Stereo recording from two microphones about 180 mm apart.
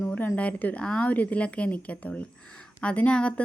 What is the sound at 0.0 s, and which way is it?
A woman's voice, 10° left (ahead or behind).